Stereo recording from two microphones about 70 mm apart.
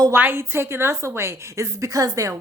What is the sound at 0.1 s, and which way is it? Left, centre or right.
A woman's voice, right.